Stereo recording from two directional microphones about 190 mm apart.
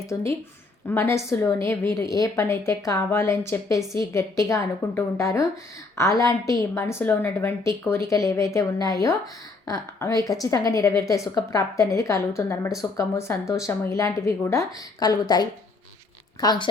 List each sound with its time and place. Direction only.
0.1 s a woman's voice: 15° left (ahead or behind)